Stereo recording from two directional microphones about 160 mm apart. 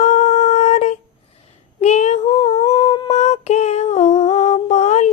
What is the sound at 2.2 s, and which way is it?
Humming, 25° left (ahead or behind).